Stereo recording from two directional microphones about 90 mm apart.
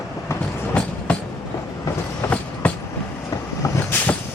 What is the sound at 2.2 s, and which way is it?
Train, 20° left (ahead or behind).